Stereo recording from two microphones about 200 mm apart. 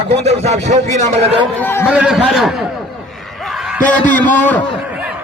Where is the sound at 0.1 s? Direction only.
30° right (ahead or behind).